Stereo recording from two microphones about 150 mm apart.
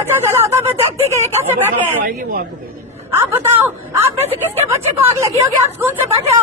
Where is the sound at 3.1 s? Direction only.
15° right (ahead or behind).